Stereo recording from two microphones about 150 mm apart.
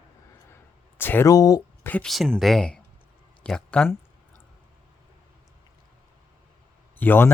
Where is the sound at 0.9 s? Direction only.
15° left (ahead or behind).